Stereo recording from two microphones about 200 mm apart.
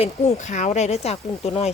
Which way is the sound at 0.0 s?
35° left (ahead or behind).